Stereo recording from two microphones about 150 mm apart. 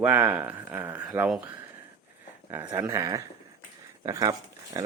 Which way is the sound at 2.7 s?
20° right (ahead or behind).